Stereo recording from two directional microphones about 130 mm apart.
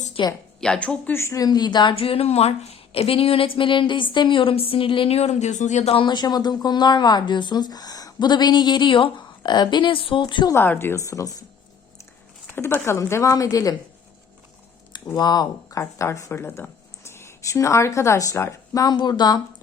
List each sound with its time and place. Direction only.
0.2 s speech: 40° left (ahead or behind)
0.6 s speech: 10° left (ahead or behind); by 10.5 s 35° left (ahead or behind)
10.5 s speech: 15° left (ahead or behind)
12.5 s speech: 20° left (ahead or behind)
15.1 s speech: 30° left (ahead or behind)